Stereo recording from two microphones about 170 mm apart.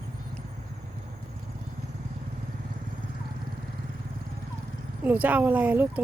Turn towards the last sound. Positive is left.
turn(degrees=-10)  # may be behind; listen again after turning